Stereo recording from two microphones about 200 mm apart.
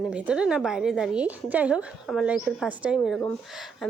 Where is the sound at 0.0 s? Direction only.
5° right (ahead or behind).